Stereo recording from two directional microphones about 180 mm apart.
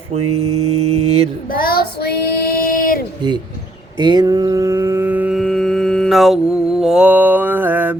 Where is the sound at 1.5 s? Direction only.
55° left (ahead or behind).